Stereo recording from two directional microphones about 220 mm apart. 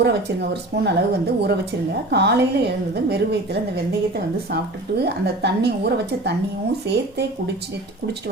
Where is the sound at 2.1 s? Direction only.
50° right (ahead or behind).